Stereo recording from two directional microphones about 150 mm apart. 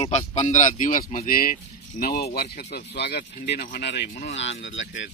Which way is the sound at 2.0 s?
85° left.